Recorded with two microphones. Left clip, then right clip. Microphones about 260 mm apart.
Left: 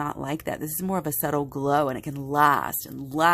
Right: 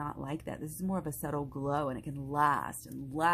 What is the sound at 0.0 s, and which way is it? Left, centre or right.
Speech, left.